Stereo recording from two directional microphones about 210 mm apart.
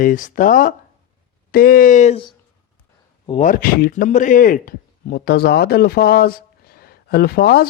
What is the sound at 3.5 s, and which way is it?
Speech, 45° left (ahead or behind).